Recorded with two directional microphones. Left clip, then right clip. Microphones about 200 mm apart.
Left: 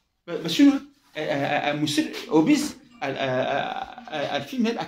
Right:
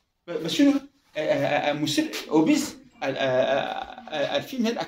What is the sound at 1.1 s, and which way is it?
Speech, 15° right (ahead or behind).